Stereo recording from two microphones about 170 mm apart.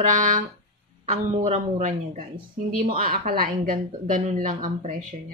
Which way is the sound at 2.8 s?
55° right (ahead or behind).